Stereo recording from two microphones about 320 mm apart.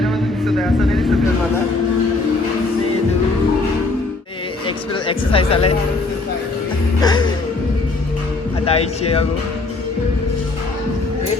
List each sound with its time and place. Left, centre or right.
4.6 s speech: centre
7.0 s music: centre
8.6 s a man's voice: centre